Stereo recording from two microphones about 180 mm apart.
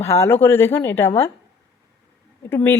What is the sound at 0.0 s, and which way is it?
A woman's voice, 15° left (ahead or behind).